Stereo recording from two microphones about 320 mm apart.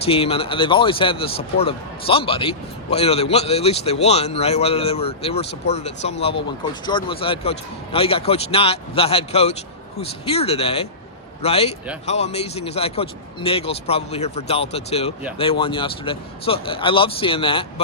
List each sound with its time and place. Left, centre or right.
0.0 s speech: centre